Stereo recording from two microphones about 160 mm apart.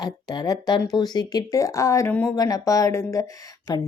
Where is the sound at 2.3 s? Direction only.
25° left (ahead or behind).